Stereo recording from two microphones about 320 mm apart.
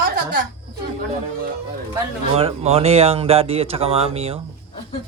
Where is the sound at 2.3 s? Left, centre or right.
Centre.